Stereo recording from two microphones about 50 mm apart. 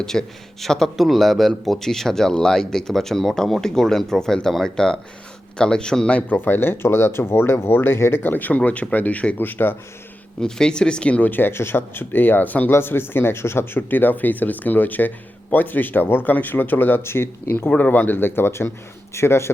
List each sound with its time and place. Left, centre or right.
0.0 s speech: centre
6.3 s speech: left
8.2 s a man's voice: left
10.4 s speech: centre
11.2 s speech: left
12.7 s speech: left
13.9 s a man's voice: left
17.0 s speech: left
17.7 s speech: left